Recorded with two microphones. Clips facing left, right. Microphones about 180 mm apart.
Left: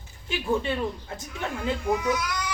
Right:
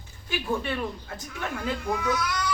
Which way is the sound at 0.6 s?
20° left (ahead or behind).